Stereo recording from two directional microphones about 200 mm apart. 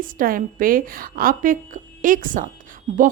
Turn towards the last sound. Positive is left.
turn(degrees=-35)  # may be behind; listen again after turning